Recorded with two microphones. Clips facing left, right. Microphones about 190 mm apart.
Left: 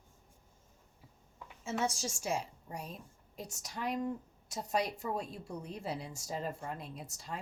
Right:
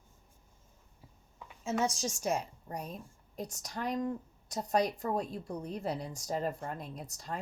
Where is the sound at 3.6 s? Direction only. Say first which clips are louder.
Right 1 dB; 5° left (ahead or behind).